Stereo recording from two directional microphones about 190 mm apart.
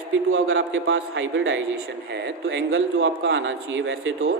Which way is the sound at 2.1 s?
65° right (ahead or behind).